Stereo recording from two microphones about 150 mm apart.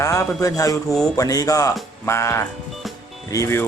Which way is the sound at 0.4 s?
20° left (ahead or behind).